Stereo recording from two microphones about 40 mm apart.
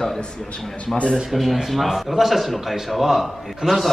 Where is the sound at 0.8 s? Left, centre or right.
Left.